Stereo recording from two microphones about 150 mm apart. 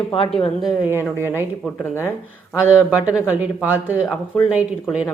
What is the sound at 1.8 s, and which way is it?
Speech, 15° left (ahead or behind).